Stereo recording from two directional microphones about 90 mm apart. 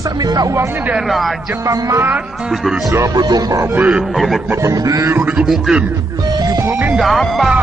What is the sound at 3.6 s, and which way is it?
Speech, 20° right (ahead or behind).